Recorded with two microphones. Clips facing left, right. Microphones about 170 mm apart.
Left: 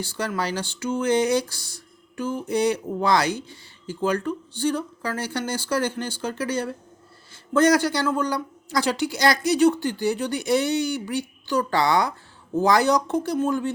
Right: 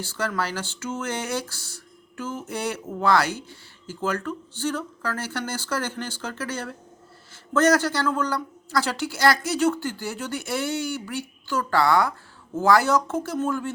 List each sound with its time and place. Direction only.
0.0 s speech: 15° left (ahead or behind)